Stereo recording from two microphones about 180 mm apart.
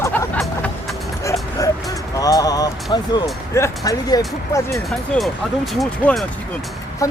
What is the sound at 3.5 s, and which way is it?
Speech, 20° left (ahead or behind).